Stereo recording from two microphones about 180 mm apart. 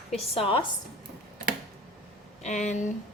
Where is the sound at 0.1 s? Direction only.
35° left (ahead or behind).